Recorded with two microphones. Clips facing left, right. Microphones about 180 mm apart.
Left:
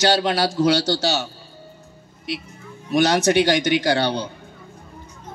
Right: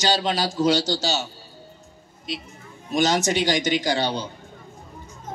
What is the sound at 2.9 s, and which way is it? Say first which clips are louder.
A man's voice: left 4 dB; 60° left (ahead or behind).